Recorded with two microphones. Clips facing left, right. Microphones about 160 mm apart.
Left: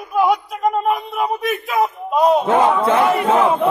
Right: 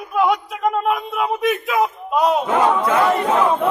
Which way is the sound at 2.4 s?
25° left (ahead or behind).